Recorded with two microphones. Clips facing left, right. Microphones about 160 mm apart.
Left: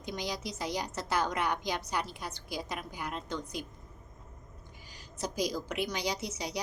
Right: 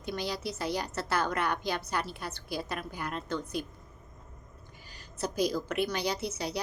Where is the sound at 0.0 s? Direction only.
15° left (ahead or behind).